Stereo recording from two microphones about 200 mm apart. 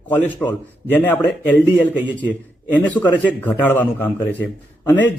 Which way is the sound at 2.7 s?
10° left (ahead or behind).